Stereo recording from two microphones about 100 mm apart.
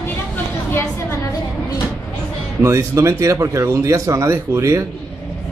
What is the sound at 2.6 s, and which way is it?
Speech, 30° right (ahead or behind).